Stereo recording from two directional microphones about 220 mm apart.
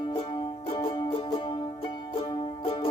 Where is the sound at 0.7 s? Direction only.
20° left (ahead or behind).